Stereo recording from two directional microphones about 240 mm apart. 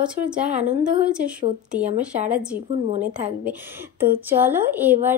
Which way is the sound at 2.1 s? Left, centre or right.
Right.